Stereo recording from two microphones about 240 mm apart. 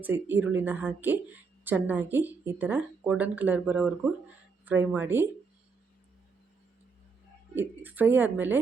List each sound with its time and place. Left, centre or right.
0.0 s speech: centre
7.5 s speech: centre